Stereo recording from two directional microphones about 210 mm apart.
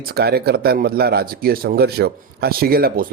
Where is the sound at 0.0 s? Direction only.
45° right (ahead or behind).